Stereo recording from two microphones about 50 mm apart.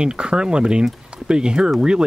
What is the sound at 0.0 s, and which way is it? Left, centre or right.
Speech, centre.